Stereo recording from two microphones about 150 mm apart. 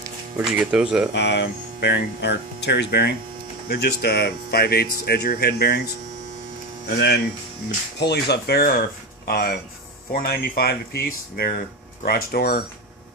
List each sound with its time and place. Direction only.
0.3 s speech: 5° right (ahead or behind)
1.8 s speech: 90° left